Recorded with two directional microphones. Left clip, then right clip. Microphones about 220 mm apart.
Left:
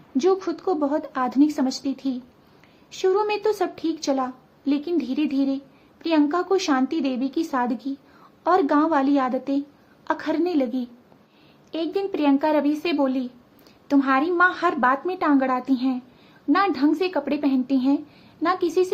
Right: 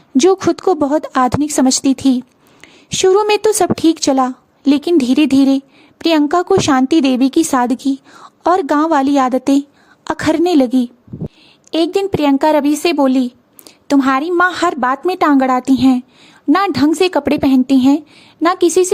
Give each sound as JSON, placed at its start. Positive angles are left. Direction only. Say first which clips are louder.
{"t": 0.2, "sound": "speech", "louder": "right 10 dB", "side_deg": -50}